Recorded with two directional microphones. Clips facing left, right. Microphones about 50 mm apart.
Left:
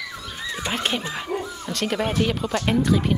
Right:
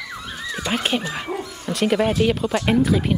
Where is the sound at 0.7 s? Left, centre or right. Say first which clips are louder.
Right 3 dB; centre.